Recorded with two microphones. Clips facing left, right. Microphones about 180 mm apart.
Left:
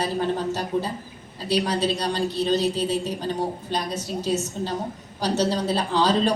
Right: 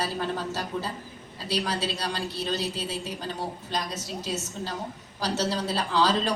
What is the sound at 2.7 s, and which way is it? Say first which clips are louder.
A woman's voice: left 8 dB; 30° left (ahead or behind).